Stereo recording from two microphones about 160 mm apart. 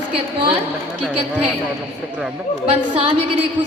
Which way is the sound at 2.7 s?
40° right (ahead or behind).